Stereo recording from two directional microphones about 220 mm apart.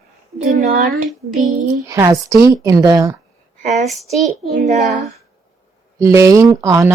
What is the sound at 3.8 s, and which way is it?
Speech, centre (ahead or behind).